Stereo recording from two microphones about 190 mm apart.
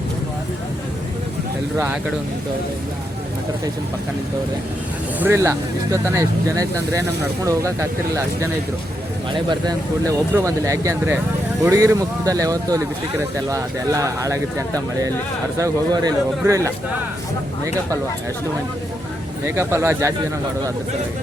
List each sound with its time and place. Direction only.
5.2 s speech: 15° right (ahead or behind)
15.5 s speech: 20° right (ahead or behind)
19.5 s speech: 15° right (ahead or behind)